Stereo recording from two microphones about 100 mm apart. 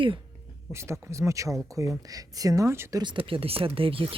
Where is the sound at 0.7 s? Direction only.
30° right (ahead or behind).